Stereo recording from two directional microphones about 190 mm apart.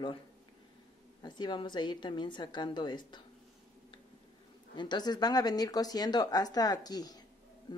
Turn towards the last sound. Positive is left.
turn(degrees=20)  # may be behind; listen again after turning